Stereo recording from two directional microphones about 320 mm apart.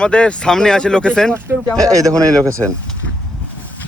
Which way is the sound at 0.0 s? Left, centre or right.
Centre.